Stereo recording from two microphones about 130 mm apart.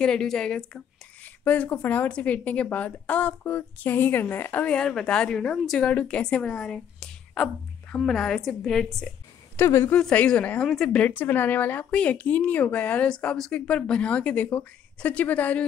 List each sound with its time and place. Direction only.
0.0 s a woman's voice: 5° left (ahead or behind)
9.6 s speech: 20° left (ahead or behind)
9.9 s speech: 10° left (ahead or behind)